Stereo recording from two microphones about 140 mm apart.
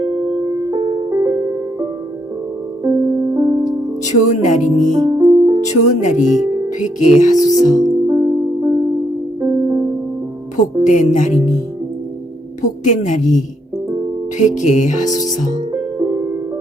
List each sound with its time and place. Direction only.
0.7 s music: 35° right (ahead or behind); by 3.6 s 20° right (ahead or behind)
4.0 s a woman's voice: 60° left (ahead or behind)
4.9 s music: 25° right (ahead or behind)
5.7 s a woman's voice: 60° left (ahead or behind)
7.5 s speech: centre (ahead or behind)
8.0 s music: 25° right (ahead or behind)
10.8 s a woman's voice: 65° left (ahead or behind)
12.6 s a woman's voice: 60° left (ahead or behind)
15.7 s music: 30° right (ahead or behind)